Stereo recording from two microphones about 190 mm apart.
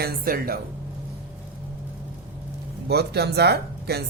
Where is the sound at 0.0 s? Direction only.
50° right (ahead or behind).